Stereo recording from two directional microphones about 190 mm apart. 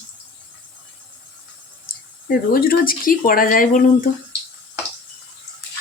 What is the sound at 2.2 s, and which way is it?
Speech, 50° left (ahead or behind).